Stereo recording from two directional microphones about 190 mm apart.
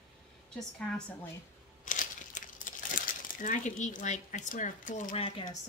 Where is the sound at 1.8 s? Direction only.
45° left (ahead or behind).